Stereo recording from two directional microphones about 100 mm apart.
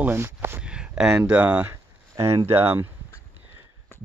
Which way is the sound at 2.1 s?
30° right (ahead or behind).